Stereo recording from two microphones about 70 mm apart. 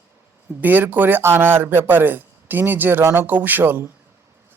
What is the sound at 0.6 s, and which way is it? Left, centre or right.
A man's voice, right.